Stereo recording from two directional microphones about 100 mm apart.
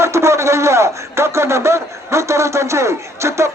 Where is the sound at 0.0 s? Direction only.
30° right (ahead or behind).